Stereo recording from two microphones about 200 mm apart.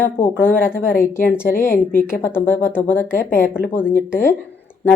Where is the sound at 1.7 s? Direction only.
45° left (ahead or behind).